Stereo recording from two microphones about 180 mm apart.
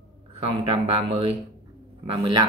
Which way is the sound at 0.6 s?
30° right (ahead or behind).